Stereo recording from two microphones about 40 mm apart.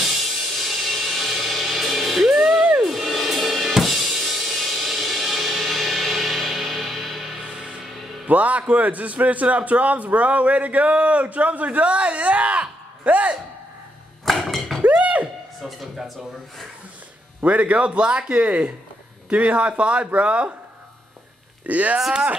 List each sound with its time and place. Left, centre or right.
0.2 s music: centre
2.3 s music: centre
2.8 s drum kit: centre
7.4 s music: right
8.3 s a man's voice: right
14.2 s a sound: centre
14.8 s a sound: right
15.6 s speech: centre
17.4 s a man's voice: right
21.6 s a man's voice: right